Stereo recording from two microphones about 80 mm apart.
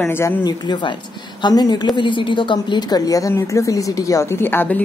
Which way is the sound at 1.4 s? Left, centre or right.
Left.